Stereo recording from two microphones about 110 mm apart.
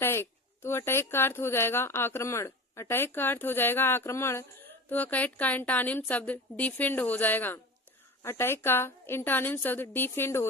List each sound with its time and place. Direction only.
0.0 s a woman's voice: 20° left (ahead or behind)